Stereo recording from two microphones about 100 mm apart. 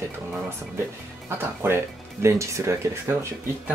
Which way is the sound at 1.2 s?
25° right (ahead or behind).